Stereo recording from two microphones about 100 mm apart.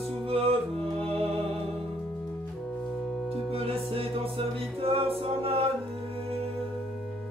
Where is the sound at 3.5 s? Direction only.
75° right (ahead or behind).